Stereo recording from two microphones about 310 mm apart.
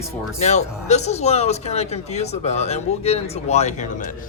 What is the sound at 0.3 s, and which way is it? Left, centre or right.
A man's voice, left.